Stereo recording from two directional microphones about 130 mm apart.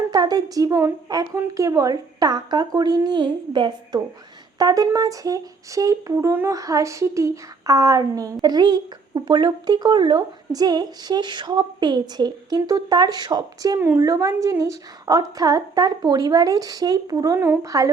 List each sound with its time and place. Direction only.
0.1 s speech: 30° right (ahead or behind)